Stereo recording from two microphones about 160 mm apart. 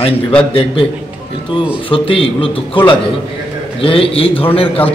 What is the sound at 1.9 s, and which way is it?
Speech, 35° left (ahead or behind).